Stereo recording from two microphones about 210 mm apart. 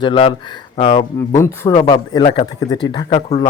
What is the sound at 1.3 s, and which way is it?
Speech, 15° left (ahead or behind).